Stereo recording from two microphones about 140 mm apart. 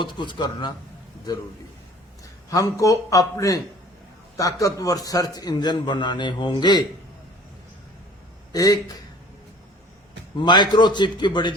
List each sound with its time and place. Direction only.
0.0 s a man's voice: 35° left (ahead or behind)
2.5 s a man's voice: 25° left (ahead or behind)
8.5 s a man's voice: 25° left (ahead or behind)
10.3 s a man's voice: 35° left (ahead or behind)